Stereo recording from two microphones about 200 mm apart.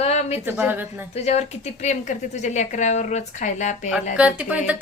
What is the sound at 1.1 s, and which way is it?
Speech, 35° left (ahead or behind).